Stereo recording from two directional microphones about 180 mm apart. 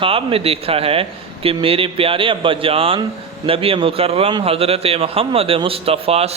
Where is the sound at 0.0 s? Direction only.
30° right (ahead or behind).